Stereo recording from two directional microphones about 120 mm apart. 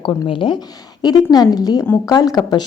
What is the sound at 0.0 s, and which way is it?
Speech, 45° left (ahead or behind).